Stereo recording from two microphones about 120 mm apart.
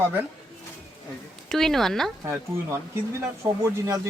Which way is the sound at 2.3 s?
20° right (ahead or behind).